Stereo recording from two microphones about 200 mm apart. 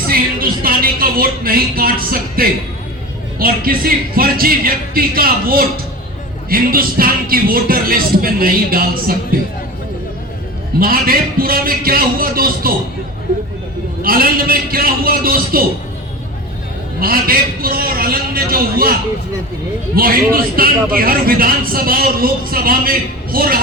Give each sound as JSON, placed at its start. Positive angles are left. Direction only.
{"t": 0.1, "sound": "a sound", "side_deg": -45}
{"t": 3.3, "sound": "a man's voice", "side_deg": -45}
{"t": 10.8, "sound": "a man's voice", "side_deg": -45}
{"t": 14.0, "sound": "a man's voice", "side_deg": -45}
{"t": 17.0, "sound": "a man's voice", "side_deg": -45}
{"t": 20.0, "sound": "a man's voice", "side_deg": -45}